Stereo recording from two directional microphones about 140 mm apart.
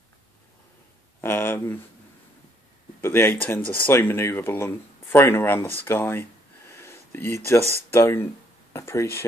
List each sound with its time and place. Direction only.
1.2 s speech: 15° left (ahead or behind)
3.0 s speech: 15° left (ahead or behind)
6.7 s a sound: 20° left (ahead or behind)
7.9 s speech: 20° left (ahead or behind)